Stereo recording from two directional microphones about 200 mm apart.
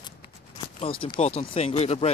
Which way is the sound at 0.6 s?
25° left (ahead or behind).